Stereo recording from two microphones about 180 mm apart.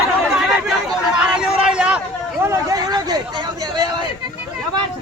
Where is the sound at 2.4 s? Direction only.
20° right (ahead or behind).